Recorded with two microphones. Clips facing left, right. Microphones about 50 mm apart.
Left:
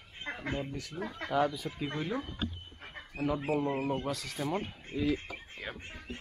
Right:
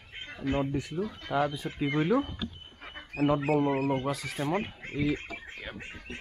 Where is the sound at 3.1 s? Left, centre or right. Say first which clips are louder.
Right 6 dB; right.